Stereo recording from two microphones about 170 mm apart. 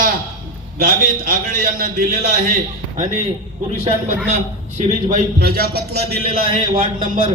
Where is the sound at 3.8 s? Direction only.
40° right (ahead or behind).